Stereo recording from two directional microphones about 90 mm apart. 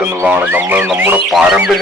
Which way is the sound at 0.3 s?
20° right (ahead or behind).